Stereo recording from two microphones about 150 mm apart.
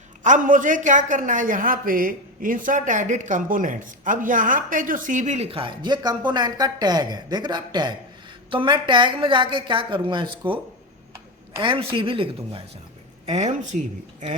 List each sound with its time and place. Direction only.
0.2 s a man's voice: 55° right (ahead or behind)
5.5 s a woman's voice: 35° right (ahead or behind)
11.6 s a woman's voice: 35° right (ahead or behind)
13.2 s speech: 50° right (ahead or behind)
13.7 s a man's voice: 60° right (ahead or behind)